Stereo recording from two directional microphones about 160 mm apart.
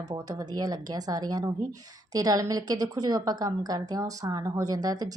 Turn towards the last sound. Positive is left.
turn(degrees=-25)  # may be behind; listen again after turning